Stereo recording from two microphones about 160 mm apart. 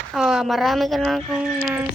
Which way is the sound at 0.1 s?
Centre (ahead or behind).